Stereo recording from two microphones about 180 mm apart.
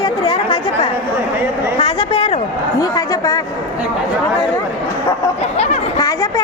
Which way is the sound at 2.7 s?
20° left (ahead or behind).